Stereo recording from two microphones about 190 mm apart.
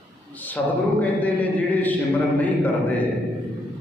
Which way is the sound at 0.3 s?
10° left (ahead or behind).